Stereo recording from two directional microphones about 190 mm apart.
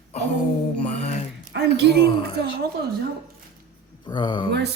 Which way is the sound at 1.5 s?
65° right (ahead or behind).